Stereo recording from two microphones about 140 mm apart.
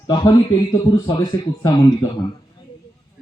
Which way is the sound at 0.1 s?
30° left (ahead or behind).